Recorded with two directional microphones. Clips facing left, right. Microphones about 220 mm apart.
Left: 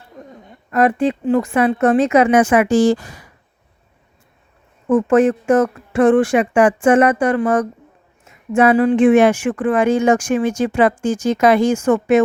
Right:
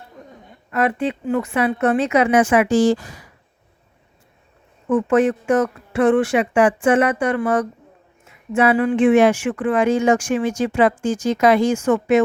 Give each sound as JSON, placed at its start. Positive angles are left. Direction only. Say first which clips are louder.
{"t": 0.7, "sound": "speech", "louder": "left 5 dB", "side_deg": 40}
{"t": 4.9, "sound": "speech", "louder": "left 3 dB", "side_deg": 45}
{"t": 9.1, "sound": "speech", "louder": "left 2 dB", "side_deg": 55}